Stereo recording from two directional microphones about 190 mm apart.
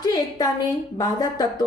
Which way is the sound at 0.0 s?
20° left (ahead or behind).